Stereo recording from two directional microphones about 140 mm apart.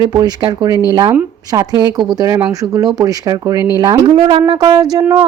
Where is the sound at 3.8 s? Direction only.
35° right (ahead or behind).